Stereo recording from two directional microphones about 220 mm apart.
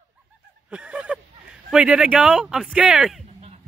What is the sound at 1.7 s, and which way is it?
Speech, 5° right (ahead or behind).